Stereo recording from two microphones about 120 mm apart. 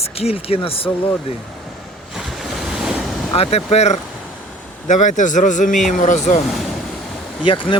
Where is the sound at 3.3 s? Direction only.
55° left (ahead or behind).